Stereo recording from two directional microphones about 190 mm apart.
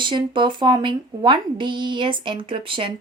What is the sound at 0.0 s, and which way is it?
Speech, 25° right (ahead or behind).